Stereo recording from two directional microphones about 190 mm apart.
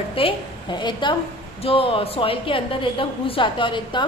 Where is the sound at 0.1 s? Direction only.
25° left (ahead or behind).